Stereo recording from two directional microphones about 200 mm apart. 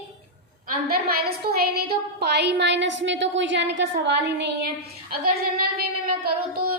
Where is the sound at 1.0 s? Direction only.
50° right (ahead or behind).